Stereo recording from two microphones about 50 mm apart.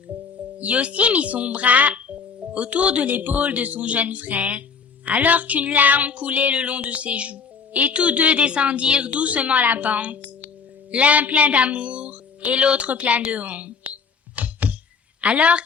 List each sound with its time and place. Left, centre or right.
0.6 s a woman's voice: right
3.1 s a woman's voice: right
13.3 s a sound: right
15.2 s a woman's voice: right